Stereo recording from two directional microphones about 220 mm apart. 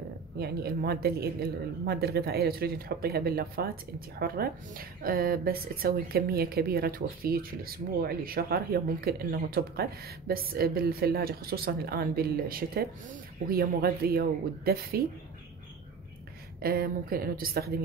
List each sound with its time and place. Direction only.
0.4 s speech: 45° right (ahead or behind)
16.6 s speech: 40° right (ahead or behind)